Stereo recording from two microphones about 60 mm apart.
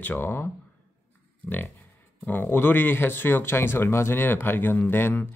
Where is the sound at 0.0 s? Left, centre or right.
Left.